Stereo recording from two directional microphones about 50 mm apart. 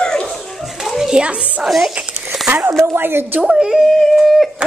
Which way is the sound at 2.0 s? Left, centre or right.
Right.